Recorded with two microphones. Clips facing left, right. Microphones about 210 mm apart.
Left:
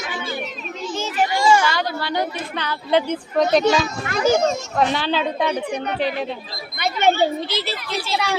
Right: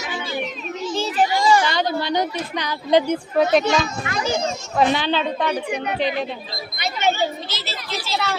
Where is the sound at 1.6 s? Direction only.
20° right (ahead or behind).